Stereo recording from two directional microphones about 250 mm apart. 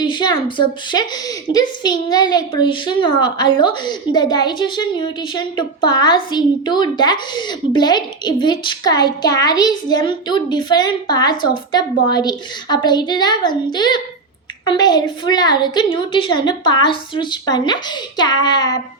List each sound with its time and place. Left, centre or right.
0.0 s a woman's voice: centre